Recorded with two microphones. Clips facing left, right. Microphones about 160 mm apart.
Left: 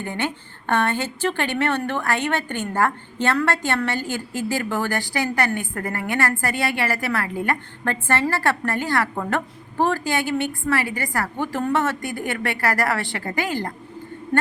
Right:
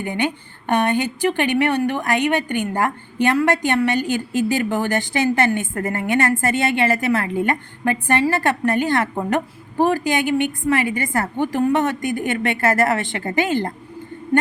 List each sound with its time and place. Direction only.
0.0 s a woman's voice: 15° right (ahead or behind)